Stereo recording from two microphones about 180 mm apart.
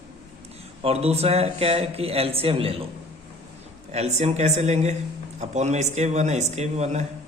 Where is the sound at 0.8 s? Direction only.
35° right (ahead or behind).